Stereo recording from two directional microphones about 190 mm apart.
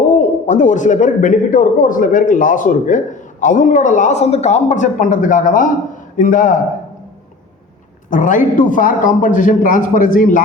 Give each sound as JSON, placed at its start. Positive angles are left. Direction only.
{"t": 0.4, "sound": "speech", "side_deg": 40}
{"t": 8.1, "sound": "speech", "side_deg": 45}